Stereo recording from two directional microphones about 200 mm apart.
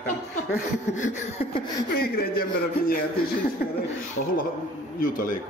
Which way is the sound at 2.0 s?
50° left (ahead or behind).